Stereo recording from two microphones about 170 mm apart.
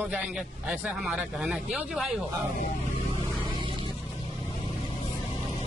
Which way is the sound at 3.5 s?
30° right (ahead or behind).